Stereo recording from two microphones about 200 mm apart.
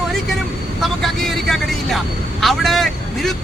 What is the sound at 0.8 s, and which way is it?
Speech, centre (ahead or behind).